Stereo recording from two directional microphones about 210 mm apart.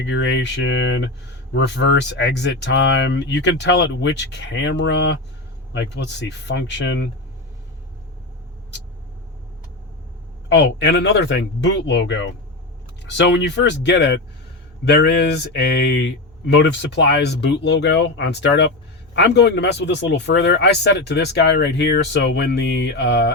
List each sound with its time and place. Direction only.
0.0 s speech: 60° left (ahead or behind)
10.5 s speech: 55° left (ahead or behind)